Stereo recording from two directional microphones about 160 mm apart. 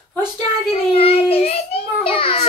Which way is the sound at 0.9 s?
35° left (ahead or behind).